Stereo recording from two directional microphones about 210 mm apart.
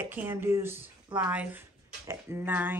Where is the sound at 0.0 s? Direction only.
10° right (ahead or behind).